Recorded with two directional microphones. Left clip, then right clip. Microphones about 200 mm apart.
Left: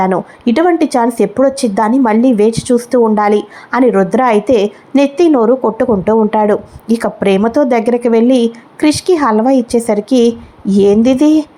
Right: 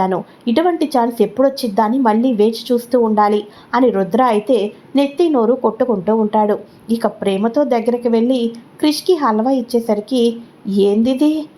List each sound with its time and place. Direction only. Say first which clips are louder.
0.0 s a woman's voice: left 5 dB; 20° left (ahead or behind)